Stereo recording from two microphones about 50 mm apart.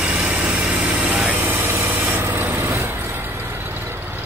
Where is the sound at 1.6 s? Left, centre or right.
Right.